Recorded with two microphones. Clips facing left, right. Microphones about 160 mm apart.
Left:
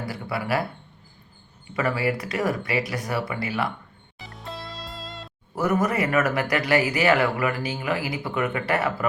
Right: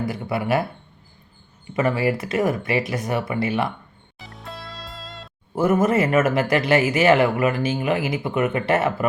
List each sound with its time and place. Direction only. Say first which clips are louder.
0.0 s speech: right 5 dB; 20° right (ahead or behind)
1.7 s speech: right 4 dB; 20° right (ahead or behind)
4.2 s music: left 1 dB; centre (ahead or behind)
5.5 s speech: right 5 dB; 25° right (ahead or behind)